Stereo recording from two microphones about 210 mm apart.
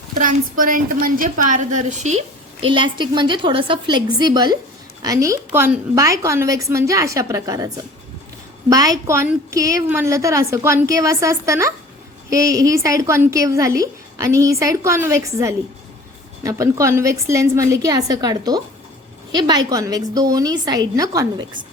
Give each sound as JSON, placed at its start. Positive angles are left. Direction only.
{"t": 0.1, "sound": "a woman's voice", "side_deg": -40}
{"t": 2.6, "sound": "a woman's voice", "side_deg": -25}
{"t": 8.7, "sound": "a woman's voice", "side_deg": -15}